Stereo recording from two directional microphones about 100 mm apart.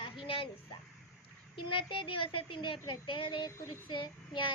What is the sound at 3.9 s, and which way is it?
Child singing, 55° left (ahead or behind).